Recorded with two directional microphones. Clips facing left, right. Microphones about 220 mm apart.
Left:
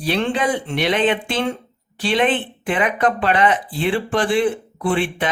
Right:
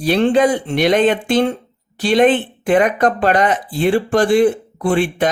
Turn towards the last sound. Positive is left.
turn(degrees=-40)  # may be behind; listen again after turning